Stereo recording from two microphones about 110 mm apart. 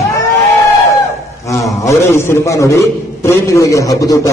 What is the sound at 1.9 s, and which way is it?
A man's voice, 25° left (ahead or behind).